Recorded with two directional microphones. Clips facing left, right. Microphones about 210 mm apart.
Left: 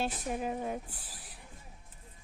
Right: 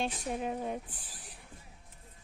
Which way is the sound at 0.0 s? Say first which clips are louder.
Even; 5° left (ahead or behind).